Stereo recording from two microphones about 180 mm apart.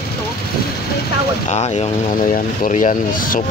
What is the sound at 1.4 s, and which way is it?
Speech, 35° left (ahead or behind).